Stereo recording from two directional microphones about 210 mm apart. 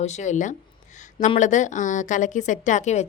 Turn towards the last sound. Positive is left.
turn(degrees=35)  # may be behind; listen again after turning